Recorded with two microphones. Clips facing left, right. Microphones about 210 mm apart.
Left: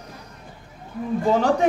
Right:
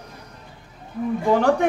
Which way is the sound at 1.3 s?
60° right (ahead or behind).